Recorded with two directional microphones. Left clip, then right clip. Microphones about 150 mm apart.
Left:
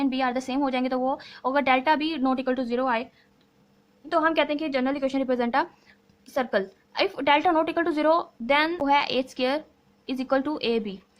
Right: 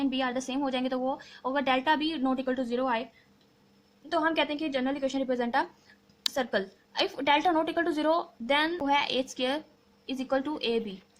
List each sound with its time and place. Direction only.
0.0 s a woman's voice: 35° left (ahead or behind)
4.1 s a woman's voice: 30° left (ahead or behind)